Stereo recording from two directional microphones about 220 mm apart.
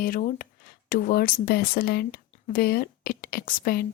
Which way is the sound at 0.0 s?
40° left (ahead or behind).